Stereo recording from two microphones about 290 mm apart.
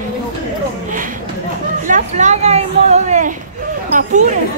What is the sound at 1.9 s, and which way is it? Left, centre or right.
A woman's voice, right.